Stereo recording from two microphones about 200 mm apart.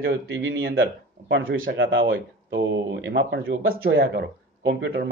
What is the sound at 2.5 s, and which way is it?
Speech, 65° right (ahead or behind).